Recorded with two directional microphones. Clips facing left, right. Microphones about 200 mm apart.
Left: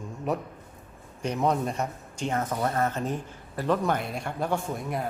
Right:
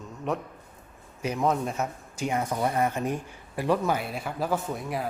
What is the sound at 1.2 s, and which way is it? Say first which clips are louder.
A man's voice: even; 5° right (ahead or behind).